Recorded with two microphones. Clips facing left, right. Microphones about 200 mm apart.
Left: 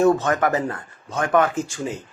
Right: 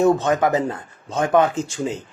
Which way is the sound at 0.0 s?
20° right (ahead or behind).